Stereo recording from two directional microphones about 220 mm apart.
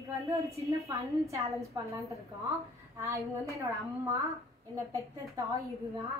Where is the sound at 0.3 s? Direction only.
15° right (ahead or behind).